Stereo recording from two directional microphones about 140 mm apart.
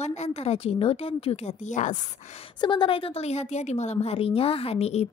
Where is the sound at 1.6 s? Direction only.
60° left (ahead or behind).